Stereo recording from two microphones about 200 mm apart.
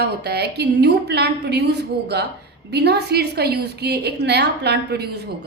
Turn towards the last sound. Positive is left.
turn(degrees=-55)  # may be behind; listen again after turning